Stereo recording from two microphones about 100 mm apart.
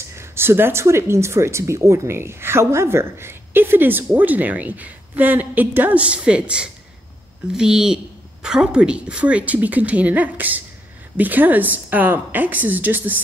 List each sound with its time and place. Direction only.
0.1 s a woman's voice: 25° right (ahead or behind)